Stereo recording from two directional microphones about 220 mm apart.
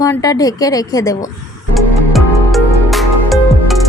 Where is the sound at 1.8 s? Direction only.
Centre (ahead or behind).